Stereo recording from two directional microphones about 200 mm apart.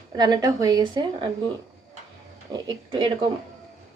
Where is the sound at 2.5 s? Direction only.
20° right (ahead or behind).